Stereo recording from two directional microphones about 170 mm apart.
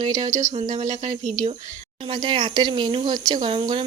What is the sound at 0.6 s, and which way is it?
Speech, 45° right (ahead or behind).